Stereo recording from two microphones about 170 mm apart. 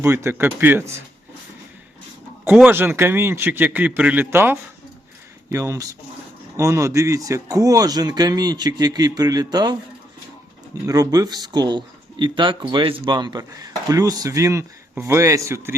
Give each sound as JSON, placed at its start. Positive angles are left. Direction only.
{"t": 0.0, "sound": "a man's voice", "side_deg": -15}
{"t": 2.5, "sound": "a man's voice", "side_deg": -10}
{"t": 10.8, "sound": "speech", "side_deg": -20}